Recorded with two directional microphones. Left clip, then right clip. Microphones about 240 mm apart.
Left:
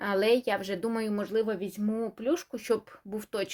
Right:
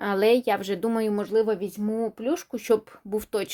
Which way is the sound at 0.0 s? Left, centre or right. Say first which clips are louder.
Right 4 dB; right.